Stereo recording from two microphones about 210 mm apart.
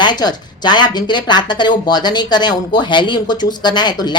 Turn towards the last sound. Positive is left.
turn(degrees=20)  # may be behind; listen again after turning